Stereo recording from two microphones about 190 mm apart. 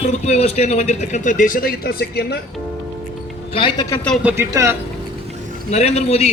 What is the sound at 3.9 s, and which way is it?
Speech, 5° left (ahead or behind).